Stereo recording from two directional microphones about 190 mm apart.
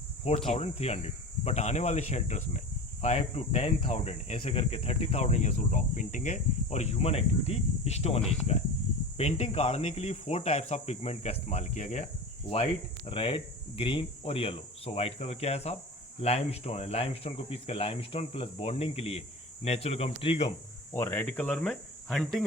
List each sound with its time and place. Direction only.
0.3 s speech: 30° left (ahead or behind)
13.1 s speech: 25° left (ahead or behind)
20.9 s speech: 10° left (ahead or behind)